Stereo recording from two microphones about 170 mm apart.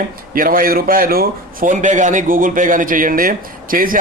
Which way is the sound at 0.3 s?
55° right (ahead or behind).